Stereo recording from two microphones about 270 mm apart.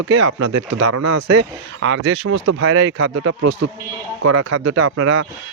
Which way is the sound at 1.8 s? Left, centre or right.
Right.